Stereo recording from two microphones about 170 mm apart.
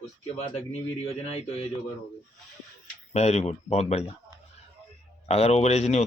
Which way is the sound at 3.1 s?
40° left (ahead or behind).